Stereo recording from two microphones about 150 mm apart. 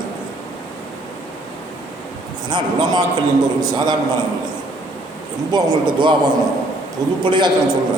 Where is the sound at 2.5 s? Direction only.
30° right (ahead or behind).